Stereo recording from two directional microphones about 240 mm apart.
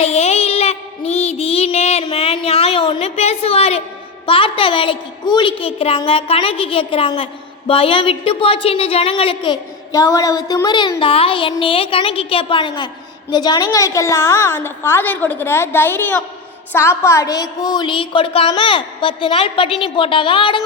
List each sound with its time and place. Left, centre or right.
0.0 s child singing: left
4.3 s a woman's voice: left